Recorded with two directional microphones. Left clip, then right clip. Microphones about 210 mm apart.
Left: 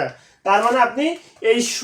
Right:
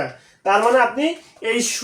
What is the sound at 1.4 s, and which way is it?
Speech, 10° right (ahead or behind).